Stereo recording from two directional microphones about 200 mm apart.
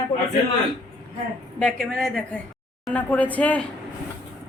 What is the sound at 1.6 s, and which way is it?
A woman's voice, centre (ahead or behind).